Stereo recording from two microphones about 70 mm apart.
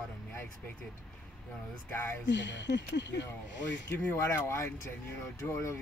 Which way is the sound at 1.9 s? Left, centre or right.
Left.